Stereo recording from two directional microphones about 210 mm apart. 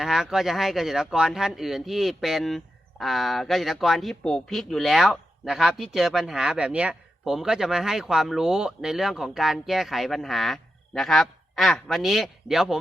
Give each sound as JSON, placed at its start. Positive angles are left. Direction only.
{"t": 0.0, "sound": "speech", "side_deg": 0}